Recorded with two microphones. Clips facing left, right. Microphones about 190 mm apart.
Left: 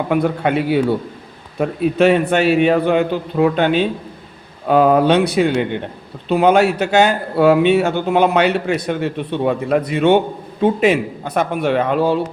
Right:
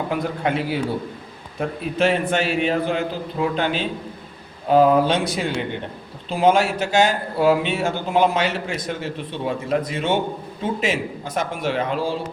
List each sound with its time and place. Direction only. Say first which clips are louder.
0.1 s a man's voice: left 8 dB; 65° left (ahead or behind)